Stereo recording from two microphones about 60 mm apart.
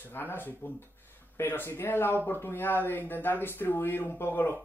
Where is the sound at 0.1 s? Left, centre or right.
Left.